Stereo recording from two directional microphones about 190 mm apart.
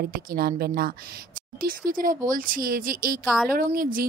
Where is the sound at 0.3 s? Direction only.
55° right (ahead or behind).